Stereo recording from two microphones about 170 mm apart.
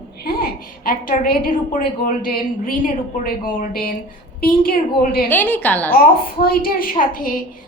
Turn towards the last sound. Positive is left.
turn(degrees=55)  # may be behind; listen again after turning